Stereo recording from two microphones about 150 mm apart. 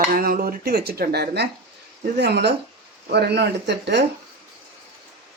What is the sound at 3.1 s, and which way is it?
Speech, 90° right.